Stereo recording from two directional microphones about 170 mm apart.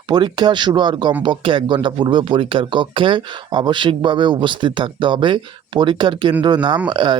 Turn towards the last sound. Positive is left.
turn(degrees=-25)  # may be behind; listen again after turning